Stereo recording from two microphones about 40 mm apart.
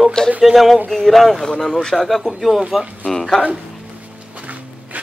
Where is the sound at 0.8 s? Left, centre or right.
Centre.